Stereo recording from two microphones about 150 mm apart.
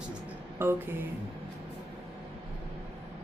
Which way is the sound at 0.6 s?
15° right (ahead or behind).